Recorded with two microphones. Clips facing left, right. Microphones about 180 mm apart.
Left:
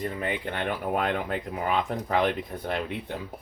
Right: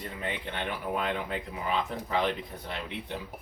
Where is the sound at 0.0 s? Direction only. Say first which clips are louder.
Left 6 dB; 50° left (ahead or behind).